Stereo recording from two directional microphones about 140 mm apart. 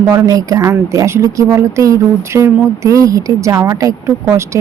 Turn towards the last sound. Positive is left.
turn(degrees=-20)  # may be behind; listen again after turning